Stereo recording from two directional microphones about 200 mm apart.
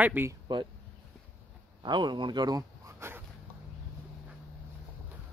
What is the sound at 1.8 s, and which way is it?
Speech, 20° right (ahead or behind).